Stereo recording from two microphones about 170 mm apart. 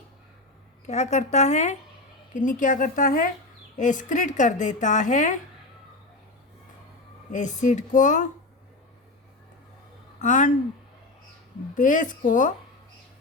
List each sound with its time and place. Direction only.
0.9 s speech: 40° left (ahead or behind)
7.3 s speech: 45° left (ahead or behind)
10.2 s speech: 45° left (ahead or behind)
11.7 s speech: 50° left (ahead or behind)